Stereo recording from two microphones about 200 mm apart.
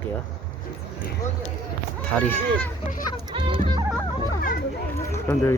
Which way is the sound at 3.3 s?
25° right (ahead or behind).